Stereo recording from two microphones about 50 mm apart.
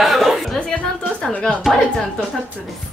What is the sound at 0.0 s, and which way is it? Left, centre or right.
Chuckle, centre.